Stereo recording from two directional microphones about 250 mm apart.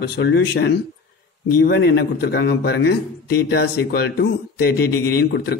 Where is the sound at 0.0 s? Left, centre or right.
Left.